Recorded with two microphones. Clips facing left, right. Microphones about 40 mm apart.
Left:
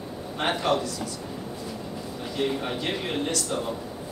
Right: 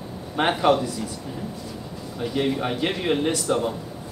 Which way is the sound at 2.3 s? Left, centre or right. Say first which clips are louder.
Right 3 dB; centre.